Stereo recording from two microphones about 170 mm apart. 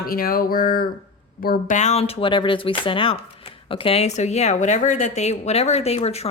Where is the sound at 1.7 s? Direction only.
40° left (ahead or behind).